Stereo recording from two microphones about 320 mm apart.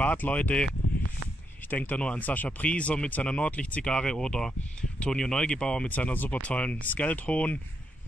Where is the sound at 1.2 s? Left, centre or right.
Right.